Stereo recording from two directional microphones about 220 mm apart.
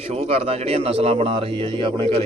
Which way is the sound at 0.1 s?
25° right (ahead or behind).